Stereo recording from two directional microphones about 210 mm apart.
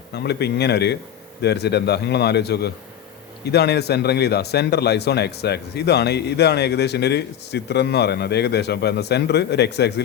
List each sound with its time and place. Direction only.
0.1 s a man's voice: 50° left (ahead or behind)